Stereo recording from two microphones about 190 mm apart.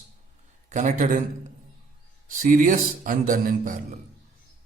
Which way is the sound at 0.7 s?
40° right (ahead or behind).